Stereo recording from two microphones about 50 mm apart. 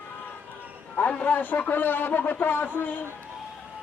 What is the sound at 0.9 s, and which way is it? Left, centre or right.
A man's voice, left.